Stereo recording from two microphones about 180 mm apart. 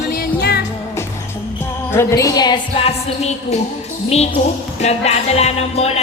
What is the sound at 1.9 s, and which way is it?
A woman's voice, 15° left (ahead or behind).